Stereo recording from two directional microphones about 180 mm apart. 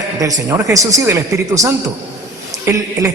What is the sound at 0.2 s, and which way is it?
A man's voice, 15° right (ahead or behind).